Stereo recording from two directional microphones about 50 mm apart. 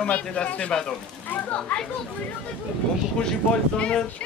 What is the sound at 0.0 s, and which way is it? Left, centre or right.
Speech, left.